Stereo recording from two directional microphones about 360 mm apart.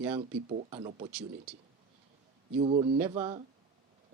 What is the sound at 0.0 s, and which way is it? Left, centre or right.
Speech, centre.